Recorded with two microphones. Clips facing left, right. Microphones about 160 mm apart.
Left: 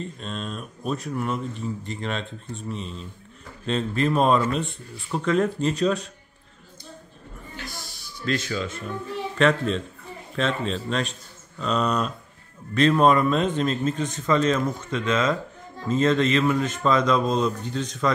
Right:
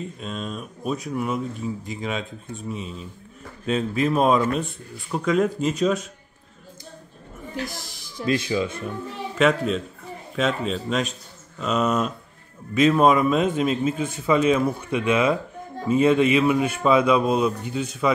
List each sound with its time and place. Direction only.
0.0 s speech: 5° right (ahead or behind)
8.3 s a man's voice: 15° right (ahead or behind)